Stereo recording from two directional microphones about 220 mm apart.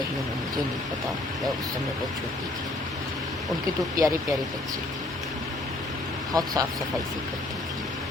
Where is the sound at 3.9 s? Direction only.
15° right (ahead or behind).